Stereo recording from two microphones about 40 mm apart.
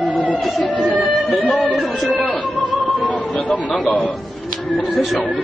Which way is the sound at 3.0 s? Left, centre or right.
Left.